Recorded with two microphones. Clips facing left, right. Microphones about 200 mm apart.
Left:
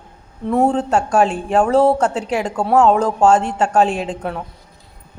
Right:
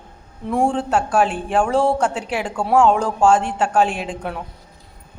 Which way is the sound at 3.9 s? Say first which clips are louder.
Left 4 dB; 40° left (ahead or behind).